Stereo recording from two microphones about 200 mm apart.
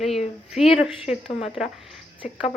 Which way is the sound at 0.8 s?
30° left (ahead or behind).